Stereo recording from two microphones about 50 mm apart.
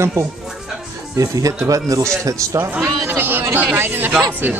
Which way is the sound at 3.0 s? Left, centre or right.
Right.